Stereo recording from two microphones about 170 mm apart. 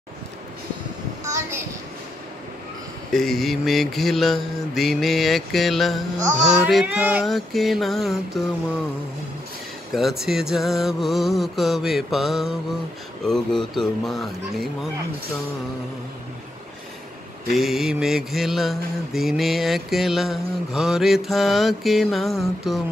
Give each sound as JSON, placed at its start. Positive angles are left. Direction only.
{"t": 1.2, "sound": "a sound", "side_deg": -15}
{"t": 3.1, "sound": "mantra", "side_deg": 0}
{"t": 9.9, "sound": "mantra", "side_deg": 0}
{"t": 17.5, "sound": "mantra", "side_deg": 0}